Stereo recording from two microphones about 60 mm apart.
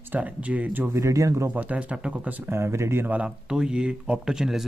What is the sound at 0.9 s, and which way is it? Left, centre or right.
Speech, right.